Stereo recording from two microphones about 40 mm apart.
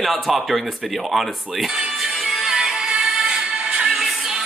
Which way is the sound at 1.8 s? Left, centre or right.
Centre.